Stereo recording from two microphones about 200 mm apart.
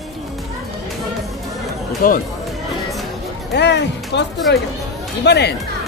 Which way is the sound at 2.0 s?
45° left (ahead or behind).